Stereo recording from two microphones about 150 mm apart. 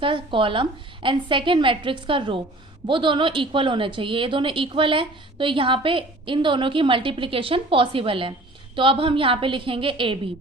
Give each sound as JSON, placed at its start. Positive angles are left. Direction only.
{"t": 0.0, "sound": "a woman's voice", "side_deg": -35}